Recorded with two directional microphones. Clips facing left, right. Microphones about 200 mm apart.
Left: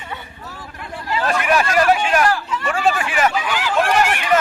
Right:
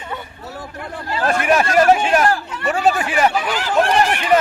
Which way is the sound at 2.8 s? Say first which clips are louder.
Right 2 dB; 40° right (ahead or behind).